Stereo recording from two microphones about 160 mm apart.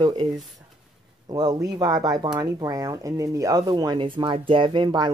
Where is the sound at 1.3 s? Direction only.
25° right (ahead or behind).